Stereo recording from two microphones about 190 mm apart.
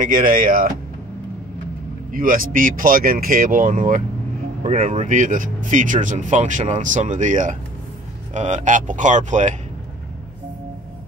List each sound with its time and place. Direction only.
0.0 s speech: 45° right (ahead or behind)
2.1 s speech: 45° right (ahead or behind)
4.6 s speech: 35° right (ahead or behind)